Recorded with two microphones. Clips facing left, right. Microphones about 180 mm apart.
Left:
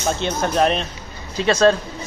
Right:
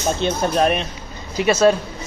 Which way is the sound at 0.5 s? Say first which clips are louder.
Even; 10° right (ahead or behind).